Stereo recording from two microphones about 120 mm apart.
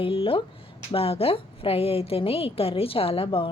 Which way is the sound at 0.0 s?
50° left (ahead or behind).